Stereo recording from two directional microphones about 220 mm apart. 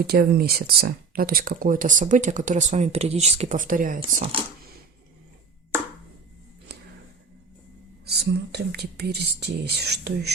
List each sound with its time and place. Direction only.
0.0 s speech: 45° right (ahead or behind)
4.2 s speech: 25° right (ahead or behind)
6.7 s music: 50° right (ahead or behind)
8.0 s speech: 50° right (ahead or behind)